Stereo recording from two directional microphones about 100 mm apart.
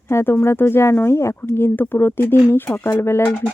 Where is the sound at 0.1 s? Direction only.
25° left (ahead or behind).